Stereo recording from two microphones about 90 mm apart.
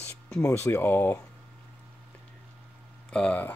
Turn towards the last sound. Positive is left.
turn(degrees=15)  # may be behind; listen again after turning